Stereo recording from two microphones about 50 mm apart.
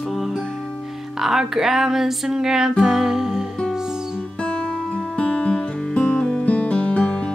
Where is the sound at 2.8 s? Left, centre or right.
Centre.